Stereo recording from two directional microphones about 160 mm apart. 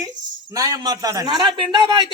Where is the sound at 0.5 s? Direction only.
20° right (ahead or behind).